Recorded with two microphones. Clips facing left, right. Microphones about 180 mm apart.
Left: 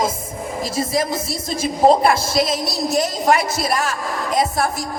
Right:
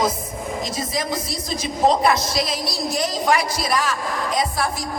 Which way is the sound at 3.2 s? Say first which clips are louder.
Left 2 dB; 25° left (ahead or behind).